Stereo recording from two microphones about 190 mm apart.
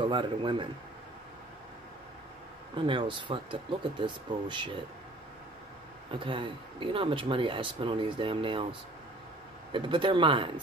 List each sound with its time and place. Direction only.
0.1 s speech: 25° right (ahead or behind)
2.7 s speech: 25° right (ahead or behind)
6.1 s speech: 25° right (ahead or behind)
9.7 s speech: 25° right (ahead or behind)